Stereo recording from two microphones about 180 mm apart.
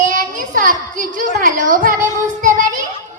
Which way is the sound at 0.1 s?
45° right (ahead or behind).